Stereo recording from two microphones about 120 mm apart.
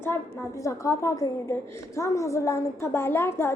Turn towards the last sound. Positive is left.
turn(degrees=20)  # may be behind; listen again after turning